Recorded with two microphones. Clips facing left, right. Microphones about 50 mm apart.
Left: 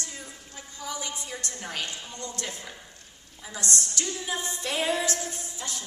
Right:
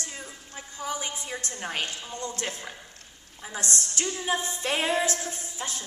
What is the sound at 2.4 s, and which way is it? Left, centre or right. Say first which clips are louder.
A woman's voice: right 3 dB; right.